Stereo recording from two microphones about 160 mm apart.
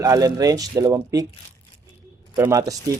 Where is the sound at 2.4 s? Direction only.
20° right (ahead or behind).